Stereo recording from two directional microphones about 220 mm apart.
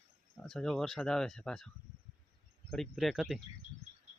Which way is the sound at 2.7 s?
Centre (ahead or behind).